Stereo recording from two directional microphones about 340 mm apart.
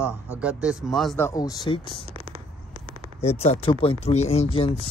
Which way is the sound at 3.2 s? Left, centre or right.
Centre.